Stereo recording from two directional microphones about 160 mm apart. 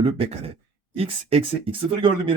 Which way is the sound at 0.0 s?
35° right (ahead or behind).